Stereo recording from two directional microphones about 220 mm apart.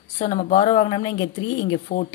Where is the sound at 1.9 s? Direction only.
40° left (ahead or behind).